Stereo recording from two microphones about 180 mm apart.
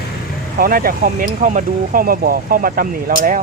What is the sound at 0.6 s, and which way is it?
Speech, 55° right (ahead or behind).